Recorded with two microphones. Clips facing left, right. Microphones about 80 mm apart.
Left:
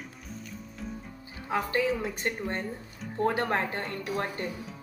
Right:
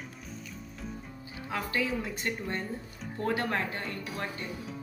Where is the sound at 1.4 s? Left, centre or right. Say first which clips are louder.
Left 5 dB; left.